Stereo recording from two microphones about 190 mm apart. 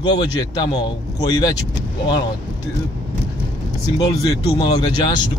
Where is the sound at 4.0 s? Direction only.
20° left (ahead or behind).